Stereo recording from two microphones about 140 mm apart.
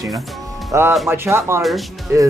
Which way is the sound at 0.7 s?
15° right (ahead or behind).